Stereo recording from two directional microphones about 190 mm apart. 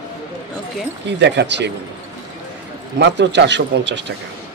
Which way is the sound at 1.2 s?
65° right (ahead or behind).